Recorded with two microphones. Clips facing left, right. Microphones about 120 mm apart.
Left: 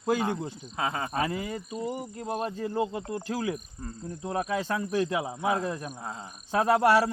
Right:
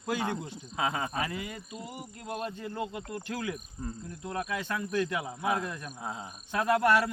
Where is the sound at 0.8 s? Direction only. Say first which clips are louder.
Even; centre (ahead or behind).